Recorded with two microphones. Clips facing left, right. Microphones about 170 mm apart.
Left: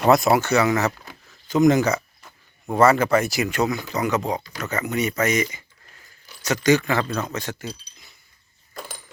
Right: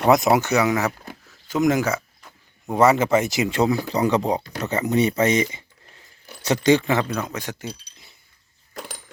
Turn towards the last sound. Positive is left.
turn(degrees=-10)  # may be behind; listen again after turning